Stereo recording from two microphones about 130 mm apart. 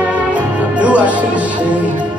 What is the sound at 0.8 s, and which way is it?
Music, 10° right (ahead or behind).